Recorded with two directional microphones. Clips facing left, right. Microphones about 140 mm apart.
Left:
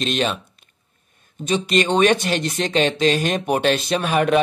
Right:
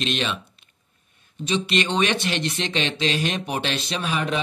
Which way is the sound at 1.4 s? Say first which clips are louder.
Left 4 dB; 45° left (ahead or behind).